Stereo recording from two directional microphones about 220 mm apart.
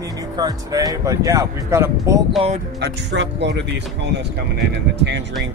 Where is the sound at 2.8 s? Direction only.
50° right (ahead or behind).